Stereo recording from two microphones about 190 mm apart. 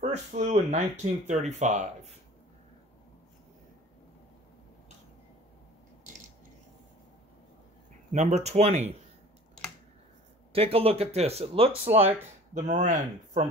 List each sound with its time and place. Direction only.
0.0 s speech: 35° right (ahead or behind)
8.1 s speech: 35° right (ahead or behind)
10.5 s speech: 30° right (ahead or behind)